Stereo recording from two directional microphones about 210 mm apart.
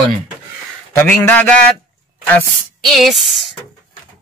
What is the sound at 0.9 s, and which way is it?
A man's voice, 10° left (ahead or behind).